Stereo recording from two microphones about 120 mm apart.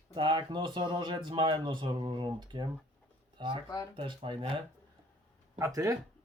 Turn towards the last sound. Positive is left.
turn(degrees=-25)  # may be behind; listen again after turning